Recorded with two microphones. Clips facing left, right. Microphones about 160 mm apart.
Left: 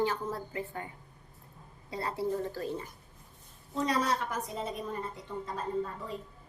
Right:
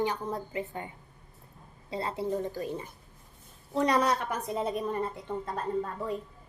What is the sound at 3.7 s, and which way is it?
A woman's voice, 65° right (ahead or behind).